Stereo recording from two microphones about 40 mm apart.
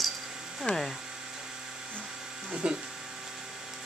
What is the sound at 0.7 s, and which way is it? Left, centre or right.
Speech, left.